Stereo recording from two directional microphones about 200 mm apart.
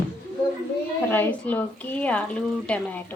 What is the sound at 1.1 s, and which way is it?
A woman's voice, 10° left (ahead or behind).